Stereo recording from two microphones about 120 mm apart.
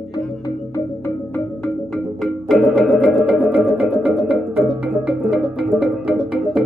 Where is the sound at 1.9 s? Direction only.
Centre (ahead or behind).